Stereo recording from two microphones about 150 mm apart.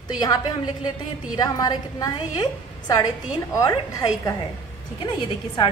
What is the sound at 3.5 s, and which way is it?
Speech, 20° left (ahead or behind).